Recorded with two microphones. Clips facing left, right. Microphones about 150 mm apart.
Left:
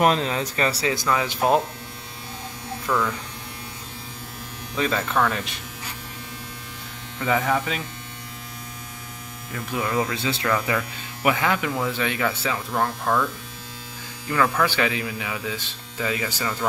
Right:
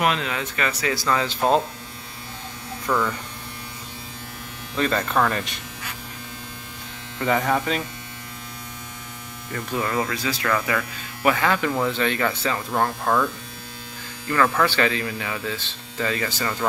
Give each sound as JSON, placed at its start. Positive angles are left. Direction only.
{"t": 0.0, "sound": "speech", "side_deg": 35}
{"t": 0.9, "sound": "speech", "side_deg": 10}
{"t": 2.9, "sound": "speech", "side_deg": -5}
{"t": 4.7, "sound": "speech", "side_deg": 5}
{"t": 7.2, "sound": "speech", "side_deg": 5}
{"t": 9.5, "sound": "speech", "side_deg": 10}
{"t": 10.1, "sound": "speech", "side_deg": 25}
{"t": 14.2, "sound": "speech", "side_deg": 10}